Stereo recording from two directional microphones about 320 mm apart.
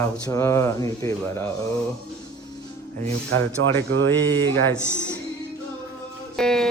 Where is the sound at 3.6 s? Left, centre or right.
Right.